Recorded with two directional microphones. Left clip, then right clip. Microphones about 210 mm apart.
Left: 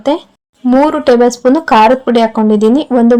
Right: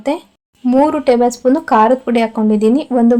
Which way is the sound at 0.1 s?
25° left (ahead or behind).